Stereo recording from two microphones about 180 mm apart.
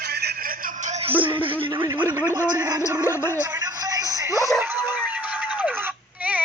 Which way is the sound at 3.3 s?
10° right (ahead or behind).